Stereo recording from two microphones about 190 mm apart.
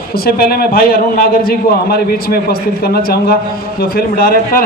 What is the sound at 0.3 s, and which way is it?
A man's voice, 55° left (ahead or behind).